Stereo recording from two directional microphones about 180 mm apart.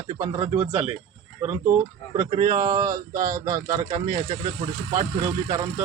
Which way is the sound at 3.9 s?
45° right (ahead or behind).